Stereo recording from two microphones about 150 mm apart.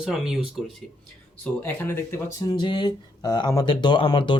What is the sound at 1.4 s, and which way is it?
Speech, 15° left (ahead or behind).